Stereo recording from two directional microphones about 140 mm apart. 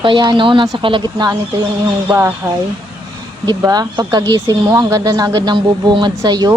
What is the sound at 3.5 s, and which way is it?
A woman's voice, 30° right (ahead or behind).